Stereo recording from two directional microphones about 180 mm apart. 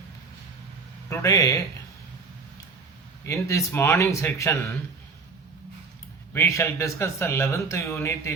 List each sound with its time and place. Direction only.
1.1 s speech: 20° left (ahead or behind)
3.2 s speech: 15° left (ahead or behind)
6.3 s speech: 15° left (ahead or behind)